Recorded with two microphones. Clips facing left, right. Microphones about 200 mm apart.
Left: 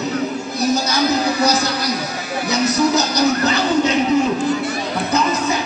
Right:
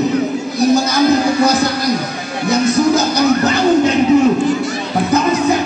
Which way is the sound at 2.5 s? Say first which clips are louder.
Right 4 dB; 50° right (ahead or behind).